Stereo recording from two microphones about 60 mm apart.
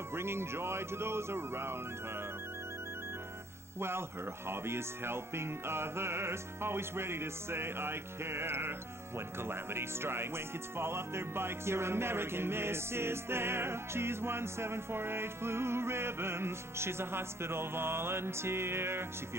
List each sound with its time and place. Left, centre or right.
0.1 s speech: right
4.5 s speech: right